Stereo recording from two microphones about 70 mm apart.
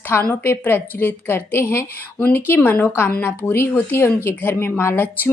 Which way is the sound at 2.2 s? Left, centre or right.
Left.